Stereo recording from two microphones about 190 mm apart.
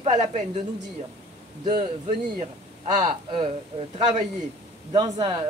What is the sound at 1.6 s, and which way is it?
Speech, 25° right (ahead or behind).